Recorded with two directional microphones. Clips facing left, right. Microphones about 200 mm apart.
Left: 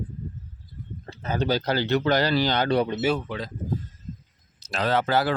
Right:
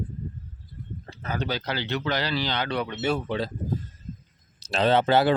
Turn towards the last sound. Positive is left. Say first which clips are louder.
# right 3 dB
turn(degrees=-25)  # may be behind; listen again after turning